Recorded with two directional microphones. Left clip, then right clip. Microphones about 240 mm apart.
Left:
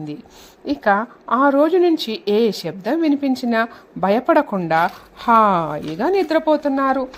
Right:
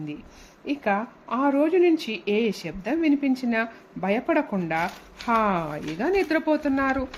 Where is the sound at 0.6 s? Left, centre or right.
Left.